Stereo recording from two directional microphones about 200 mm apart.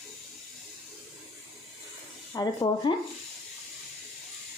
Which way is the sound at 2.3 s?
20° left (ahead or behind).